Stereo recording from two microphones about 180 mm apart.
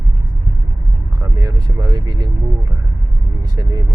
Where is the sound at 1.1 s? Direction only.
20° right (ahead or behind).